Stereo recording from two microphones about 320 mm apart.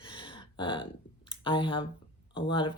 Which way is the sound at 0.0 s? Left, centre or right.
Centre.